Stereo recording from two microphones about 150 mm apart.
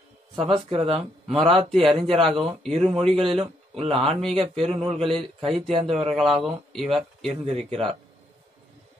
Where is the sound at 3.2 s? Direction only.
40° right (ahead or behind).